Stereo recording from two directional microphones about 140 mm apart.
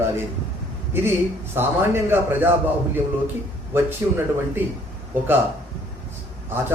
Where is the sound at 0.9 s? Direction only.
15° right (ahead or behind).